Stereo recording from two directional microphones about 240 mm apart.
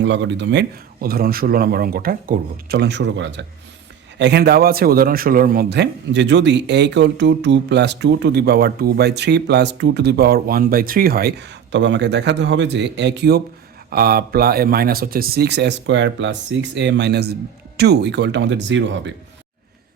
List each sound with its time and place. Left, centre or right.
0.0 s a man's voice: right